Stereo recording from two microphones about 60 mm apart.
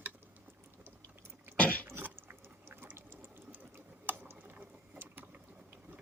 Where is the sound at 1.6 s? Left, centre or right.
Left.